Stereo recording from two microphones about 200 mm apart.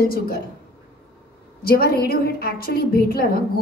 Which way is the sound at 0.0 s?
50° left (ahead or behind).